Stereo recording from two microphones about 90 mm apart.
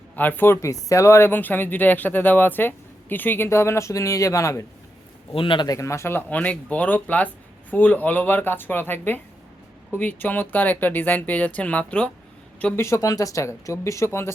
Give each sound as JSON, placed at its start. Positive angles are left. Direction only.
{"t": 0.2, "sound": "speech", "side_deg": 20}
{"t": 5.3, "sound": "a man's voice", "side_deg": 70}
{"t": 5.6, "sound": "speech", "side_deg": 35}
{"t": 12.7, "sound": "speech", "side_deg": 30}